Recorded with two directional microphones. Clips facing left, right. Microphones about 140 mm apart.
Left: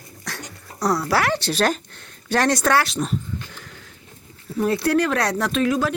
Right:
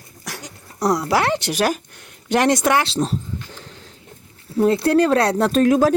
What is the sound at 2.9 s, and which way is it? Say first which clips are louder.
Speech: right 4 dB; 35° right (ahead or behind).